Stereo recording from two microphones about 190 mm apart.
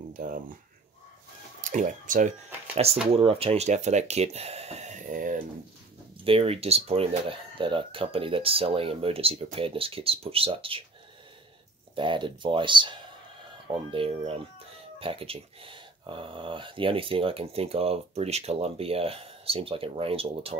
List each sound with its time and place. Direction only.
0.1 s speech: 45° right (ahead or behind)
1.6 s speech: 40° right (ahead or behind)
6.2 s speech: 30° right (ahead or behind)
11.9 s speech: 25° right (ahead or behind)